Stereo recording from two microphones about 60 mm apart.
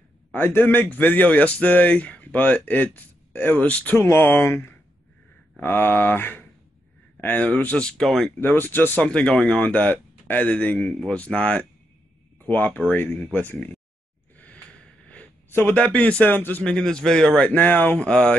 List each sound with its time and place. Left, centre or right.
0.3 s speech: left
4.0 s speech: left
7.2 s speech: left
8.0 s speech: centre
8.5 s speech: left
9.0 s a man's voice: centre
12.4 s speech: left
14.3 s a sound: left
15.7 s speech: left
16.3 s speech: left
16.6 s a man's voice: centre
17.5 s speech: left
17.9 s a man's voice: centre